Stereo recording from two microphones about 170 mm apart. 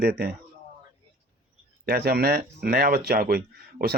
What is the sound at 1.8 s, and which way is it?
Speech, 65° right (ahead or behind).